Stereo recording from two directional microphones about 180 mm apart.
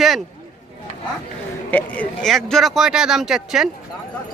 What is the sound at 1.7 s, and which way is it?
Speech, 10° left (ahead or behind).